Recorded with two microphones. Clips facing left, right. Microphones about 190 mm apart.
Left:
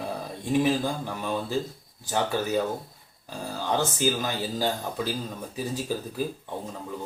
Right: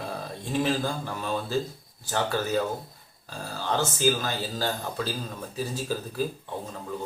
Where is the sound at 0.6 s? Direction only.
15° left (ahead or behind).